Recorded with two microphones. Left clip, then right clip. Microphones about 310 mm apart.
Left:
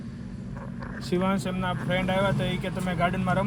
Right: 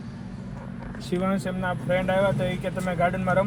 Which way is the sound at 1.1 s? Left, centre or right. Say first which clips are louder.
Even; centre.